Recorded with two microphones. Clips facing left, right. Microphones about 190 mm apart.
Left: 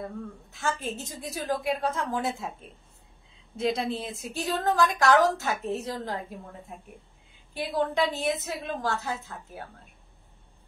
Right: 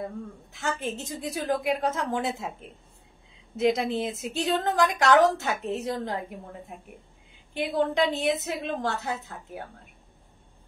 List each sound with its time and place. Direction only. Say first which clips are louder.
0.6 s a woman's voice: right 1 dB; 20° right (ahead or behind)
3.5 s a woman's voice: right 4 dB; 20° right (ahead or behind)
7.5 s a woman's voice: right 2 dB; 20° right (ahead or behind)